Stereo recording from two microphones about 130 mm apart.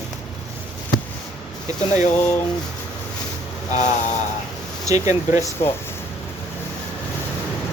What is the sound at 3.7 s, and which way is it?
Speech, 65° left (ahead or behind).